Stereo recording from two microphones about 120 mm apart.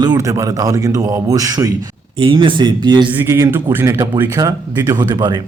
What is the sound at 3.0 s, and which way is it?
A man's voice, 20° right (ahead or behind).